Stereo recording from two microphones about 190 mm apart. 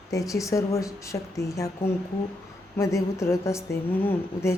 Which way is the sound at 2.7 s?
15° left (ahead or behind).